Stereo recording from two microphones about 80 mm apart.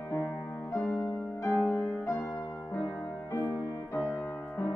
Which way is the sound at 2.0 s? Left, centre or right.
Left.